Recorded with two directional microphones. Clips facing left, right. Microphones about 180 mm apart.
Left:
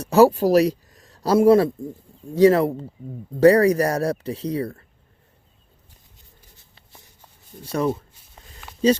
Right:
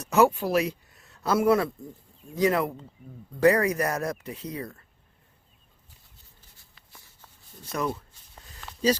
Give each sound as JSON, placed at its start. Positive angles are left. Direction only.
{"t": 0.0, "sound": "speech", "side_deg": 35}
{"t": 6.6, "sound": "writing", "side_deg": 25}